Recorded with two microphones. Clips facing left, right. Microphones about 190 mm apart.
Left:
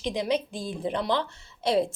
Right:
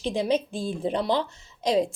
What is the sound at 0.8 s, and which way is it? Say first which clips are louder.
Speech: right 2 dB; 25° right (ahead or behind).